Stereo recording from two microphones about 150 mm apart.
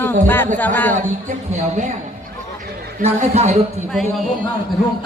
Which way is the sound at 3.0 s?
45° right (ahead or behind).